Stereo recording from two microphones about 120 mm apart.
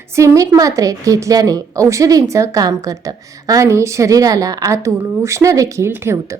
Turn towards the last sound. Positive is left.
turn(degrees=-20)  # may be behind; listen again after turning